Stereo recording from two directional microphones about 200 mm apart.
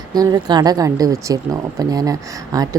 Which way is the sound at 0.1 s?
20° right (ahead or behind).